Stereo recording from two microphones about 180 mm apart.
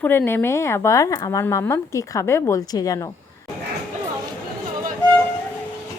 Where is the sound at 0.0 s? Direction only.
10° left (ahead or behind).